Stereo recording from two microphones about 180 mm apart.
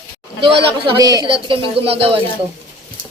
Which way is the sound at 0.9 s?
20° right (ahead or behind).